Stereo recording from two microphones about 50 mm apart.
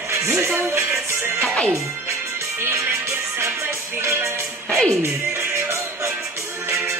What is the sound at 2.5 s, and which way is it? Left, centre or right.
Music, right.